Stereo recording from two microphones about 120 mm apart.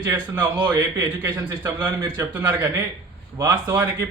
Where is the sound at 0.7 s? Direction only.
25° right (ahead or behind).